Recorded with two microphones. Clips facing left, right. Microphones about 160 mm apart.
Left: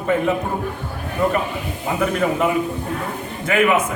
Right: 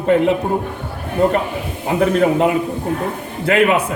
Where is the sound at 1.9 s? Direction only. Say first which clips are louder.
Right 6 dB; 35° right (ahead or behind).